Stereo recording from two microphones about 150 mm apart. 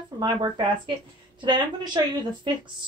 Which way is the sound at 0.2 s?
30° right (ahead or behind).